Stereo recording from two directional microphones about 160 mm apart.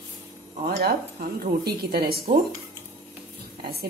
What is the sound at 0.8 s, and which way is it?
Speech, 70° right (ahead or behind).